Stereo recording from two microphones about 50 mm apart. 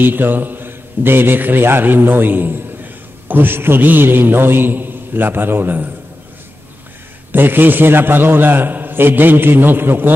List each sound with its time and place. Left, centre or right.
0.0 s a man's voice: right
7.3 s a man's voice: right